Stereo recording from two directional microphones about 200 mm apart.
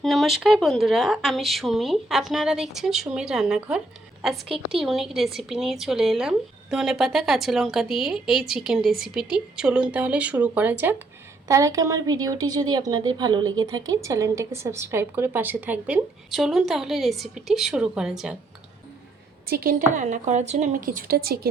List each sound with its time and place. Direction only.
0.0 s speech: centre (ahead or behind)
19.5 s a woman's voice: 45° right (ahead or behind)
20.0 s a woman's voice: 35° right (ahead or behind)